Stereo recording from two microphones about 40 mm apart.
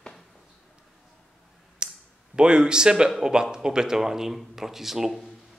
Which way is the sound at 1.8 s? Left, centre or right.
Right.